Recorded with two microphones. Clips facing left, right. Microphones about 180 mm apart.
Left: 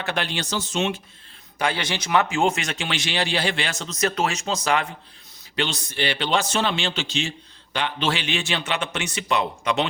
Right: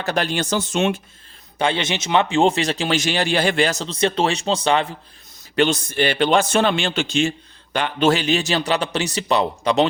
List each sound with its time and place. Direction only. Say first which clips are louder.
0.0 s a man's voice: right 5 dB; 40° right (ahead or behind)
1.5 s speech: right 4 dB; 25° right (ahead or behind)
5.5 s a man's voice: right 8 dB; 50° right (ahead or behind)